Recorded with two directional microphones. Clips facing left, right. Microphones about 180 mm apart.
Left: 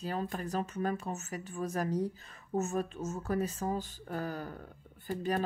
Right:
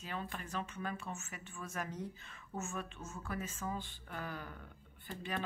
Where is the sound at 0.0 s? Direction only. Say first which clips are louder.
Left 8 dB; 40° left (ahead or behind).